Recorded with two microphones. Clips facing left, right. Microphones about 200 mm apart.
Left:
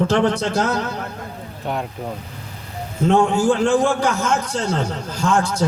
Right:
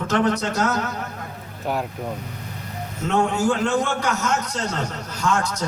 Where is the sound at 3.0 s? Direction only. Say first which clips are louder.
Left 5 dB; 30° left (ahead or behind).